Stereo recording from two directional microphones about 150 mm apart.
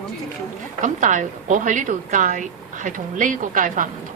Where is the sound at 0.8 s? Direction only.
55° right (ahead or behind).